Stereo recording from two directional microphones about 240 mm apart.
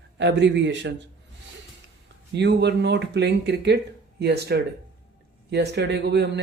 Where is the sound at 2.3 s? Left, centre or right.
Right.